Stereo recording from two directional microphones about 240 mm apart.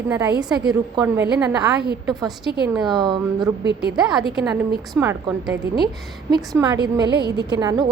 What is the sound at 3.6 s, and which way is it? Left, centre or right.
Speech, right.